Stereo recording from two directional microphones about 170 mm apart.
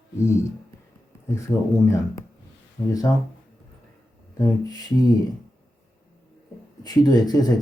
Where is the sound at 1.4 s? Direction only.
15° left (ahead or behind).